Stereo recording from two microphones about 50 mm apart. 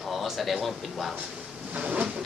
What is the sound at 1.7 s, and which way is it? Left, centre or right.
Bee, right.